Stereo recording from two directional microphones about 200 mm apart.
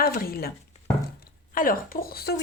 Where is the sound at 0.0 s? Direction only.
50° left (ahead or behind).